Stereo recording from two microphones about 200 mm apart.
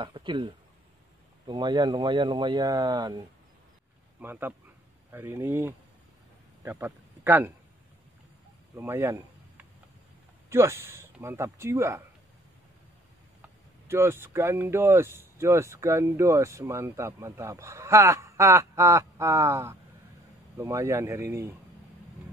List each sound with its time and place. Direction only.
0.0 s speech: 20° right (ahead or behind)
1.5 s speech: 20° right (ahead or behind)
4.2 s a man's voice: 10° right (ahead or behind)
8.7 s a sound: 10° right (ahead or behind)
10.5 s speech: 10° right (ahead or behind)
13.4 s speech: 10° right (ahead or behind)